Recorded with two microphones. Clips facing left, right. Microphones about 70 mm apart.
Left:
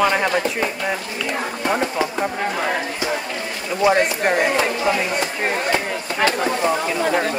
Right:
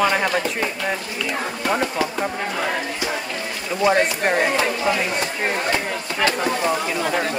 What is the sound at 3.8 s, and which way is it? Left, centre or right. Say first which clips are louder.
Speech: left 1 dB; centre.